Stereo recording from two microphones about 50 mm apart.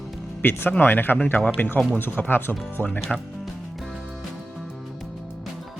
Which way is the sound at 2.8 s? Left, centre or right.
Right.